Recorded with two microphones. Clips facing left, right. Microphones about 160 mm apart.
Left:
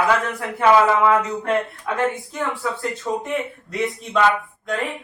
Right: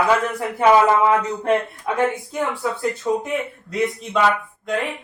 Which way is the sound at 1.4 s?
25° right (ahead or behind).